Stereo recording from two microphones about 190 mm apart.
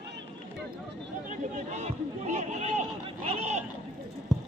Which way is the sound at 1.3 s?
40° right (ahead or behind).